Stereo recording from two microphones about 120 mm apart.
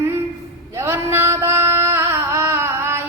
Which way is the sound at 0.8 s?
20° right (ahead or behind).